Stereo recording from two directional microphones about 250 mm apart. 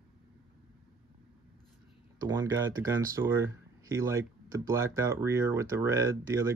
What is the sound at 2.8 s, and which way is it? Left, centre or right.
Speech, centre.